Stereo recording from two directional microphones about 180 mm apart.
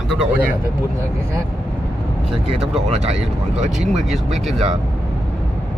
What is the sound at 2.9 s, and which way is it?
Speech, 40° right (ahead or behind).